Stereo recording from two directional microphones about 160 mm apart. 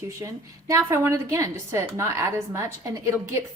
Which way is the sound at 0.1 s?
20° right (ahead or behind).